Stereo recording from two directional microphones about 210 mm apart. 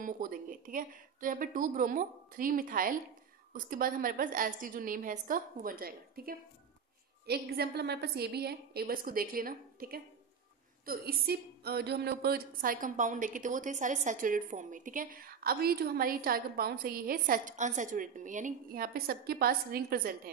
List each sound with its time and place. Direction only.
0.0 s a woman's voice: 40° right (ahead or behind)